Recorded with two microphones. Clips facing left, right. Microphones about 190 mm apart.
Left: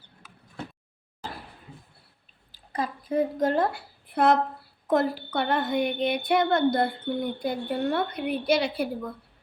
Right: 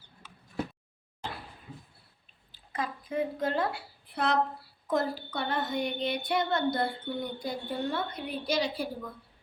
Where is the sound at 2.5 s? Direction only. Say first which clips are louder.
Left 4 dB; 35° left (ahead or behind); by 8.9 s 65° left (ahead or behind).